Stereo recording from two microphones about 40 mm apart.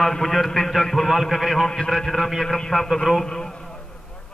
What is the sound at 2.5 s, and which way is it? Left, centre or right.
Speech, centre.